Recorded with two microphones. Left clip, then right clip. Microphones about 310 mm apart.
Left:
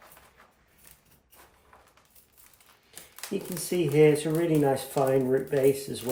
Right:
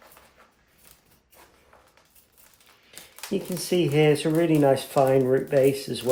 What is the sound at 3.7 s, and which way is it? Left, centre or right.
Speech, right.